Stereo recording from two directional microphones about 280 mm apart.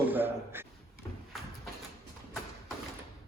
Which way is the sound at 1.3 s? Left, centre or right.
Centre.